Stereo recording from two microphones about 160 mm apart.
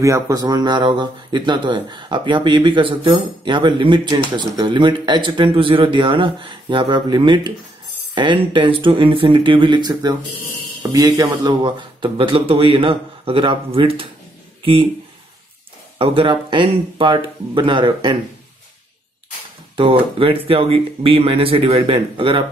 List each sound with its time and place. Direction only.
0.0 s speech: 20° right (ahead or behind)
16.0 s speech: 35° right (ahead or behind)
19.8 s speech: 35° right (ahead or behind)